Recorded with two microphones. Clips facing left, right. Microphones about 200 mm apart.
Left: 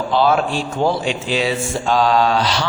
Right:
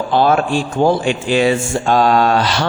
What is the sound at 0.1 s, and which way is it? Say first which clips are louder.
A man's voice: right 3 dB; 50° right (ahead or behind).